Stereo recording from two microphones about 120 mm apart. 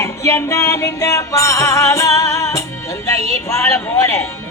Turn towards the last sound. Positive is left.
turn(degrees=20)  # may be behind; listen again after turning